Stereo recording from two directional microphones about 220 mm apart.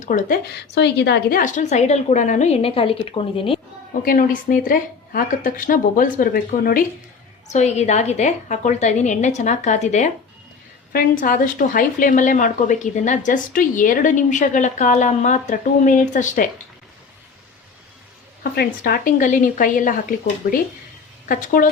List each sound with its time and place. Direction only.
0.0 s a woman's voice: 35° left (ahead or behind)
4.0 s a woman's voice: 40° left (ahead or behind)
18.5 s a woman's voice: 40° left (ahead or behind)